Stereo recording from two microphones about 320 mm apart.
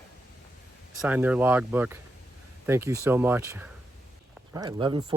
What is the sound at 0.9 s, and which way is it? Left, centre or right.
Speech, centre.